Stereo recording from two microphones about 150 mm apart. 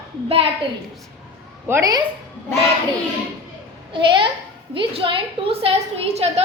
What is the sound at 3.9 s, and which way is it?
A woman's voice, 30° right (ahead or behind).